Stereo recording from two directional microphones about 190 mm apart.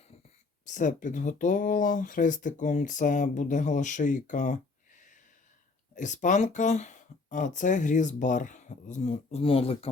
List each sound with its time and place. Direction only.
0.6 s speech: 40° left (ahead or behind)